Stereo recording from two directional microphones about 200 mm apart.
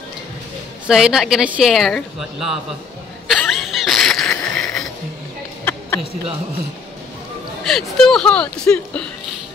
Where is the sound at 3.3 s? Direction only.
Centre (ahead or behind).